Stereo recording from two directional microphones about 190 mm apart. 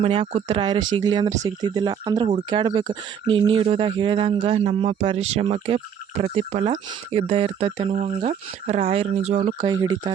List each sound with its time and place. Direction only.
0.0 s speech: 30° right (ahead or behind)
9.6 s speech: 20° right (ahead or behind)